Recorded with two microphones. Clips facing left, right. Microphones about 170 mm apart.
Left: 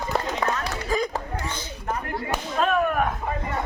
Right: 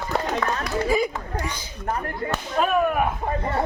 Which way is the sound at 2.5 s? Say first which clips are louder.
Right 1 dB; 10° right (ahead or behind).